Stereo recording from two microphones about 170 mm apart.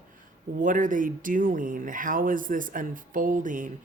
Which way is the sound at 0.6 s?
50° right (ahead or behind).